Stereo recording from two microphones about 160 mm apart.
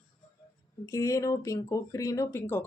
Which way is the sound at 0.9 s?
20° left (ahead or behind).